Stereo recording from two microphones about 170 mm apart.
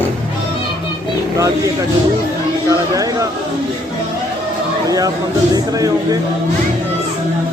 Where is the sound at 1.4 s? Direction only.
20° right (ahead or behind).